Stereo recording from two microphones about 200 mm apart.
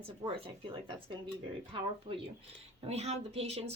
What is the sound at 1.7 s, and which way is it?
Speech, 25° right (ahead or behind).